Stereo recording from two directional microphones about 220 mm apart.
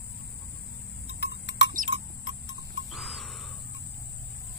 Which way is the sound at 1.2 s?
50° left (ahead or behind).